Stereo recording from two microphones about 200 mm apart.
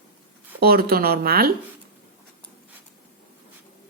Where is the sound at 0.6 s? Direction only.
50° right (ahead or behind).